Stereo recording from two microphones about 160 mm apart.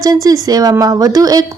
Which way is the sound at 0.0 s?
20° right (ahead or behind).